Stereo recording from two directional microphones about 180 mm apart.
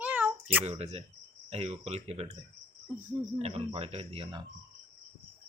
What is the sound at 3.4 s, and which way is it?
Speech, 35° right (ahead or behind).